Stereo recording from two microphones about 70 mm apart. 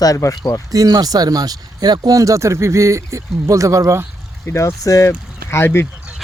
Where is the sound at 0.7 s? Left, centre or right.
Right.